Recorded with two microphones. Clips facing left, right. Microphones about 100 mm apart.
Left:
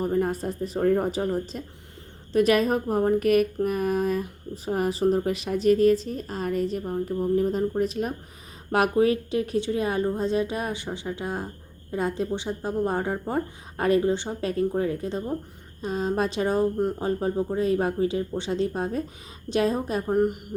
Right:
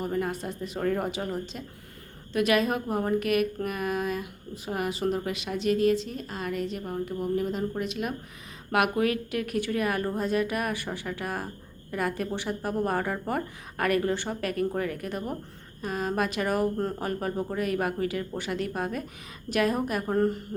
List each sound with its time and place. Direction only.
0.0 s a woman's voice: 40° left (ahead or behind)
20.1 s a woman's voice: 15° left (ahead or behind)